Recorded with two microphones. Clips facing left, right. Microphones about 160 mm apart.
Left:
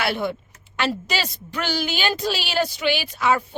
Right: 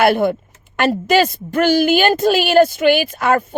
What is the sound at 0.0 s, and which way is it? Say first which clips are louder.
A woman's voice: right 10 dB; 50° right (ahead or behind).